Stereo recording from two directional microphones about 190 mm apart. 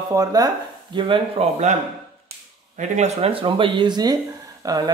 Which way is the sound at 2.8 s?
35° right (ahead or behind).